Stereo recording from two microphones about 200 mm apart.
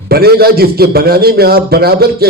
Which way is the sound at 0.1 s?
50° right (ahead or behind).